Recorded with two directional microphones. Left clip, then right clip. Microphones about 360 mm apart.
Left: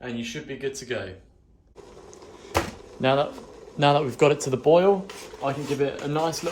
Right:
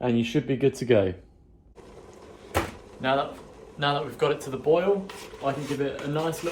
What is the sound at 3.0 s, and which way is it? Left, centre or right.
Speech, left.